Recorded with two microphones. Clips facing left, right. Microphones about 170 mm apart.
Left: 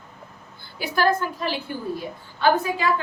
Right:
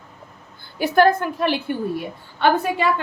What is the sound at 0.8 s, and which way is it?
A woman's voice, 55° right (ahead or behind).